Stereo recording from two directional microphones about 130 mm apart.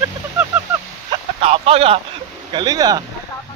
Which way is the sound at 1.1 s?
50° right (ahead or behind).